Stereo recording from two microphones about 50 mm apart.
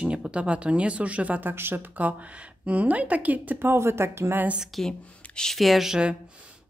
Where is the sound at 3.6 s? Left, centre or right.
Right.